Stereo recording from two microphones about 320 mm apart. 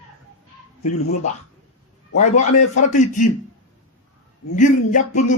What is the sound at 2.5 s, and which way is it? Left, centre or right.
Speech, left.